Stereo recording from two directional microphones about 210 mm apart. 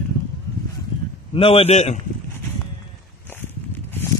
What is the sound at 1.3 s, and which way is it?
Speech, 25° left (ahead or behind).